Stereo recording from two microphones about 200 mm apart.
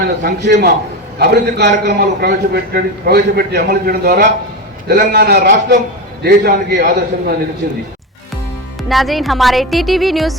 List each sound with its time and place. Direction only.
0.2 s a man's voice: 50° right (ahead or behind)
8.9 s speech: centre (ahead or behind)